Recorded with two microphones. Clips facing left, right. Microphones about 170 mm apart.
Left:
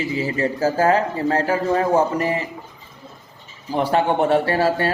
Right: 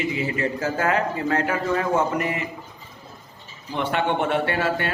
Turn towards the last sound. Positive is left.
turn(degrees=35)  # may be behind; listen again after turning